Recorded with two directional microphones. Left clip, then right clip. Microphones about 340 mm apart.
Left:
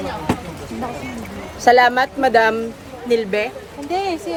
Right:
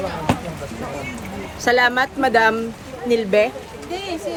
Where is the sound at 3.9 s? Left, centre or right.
Centre.